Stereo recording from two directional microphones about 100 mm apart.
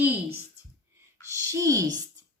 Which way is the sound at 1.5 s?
35° right (ahead or behind).